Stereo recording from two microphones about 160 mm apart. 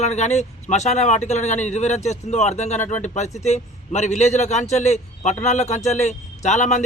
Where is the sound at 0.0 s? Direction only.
45° left (ahead or behind).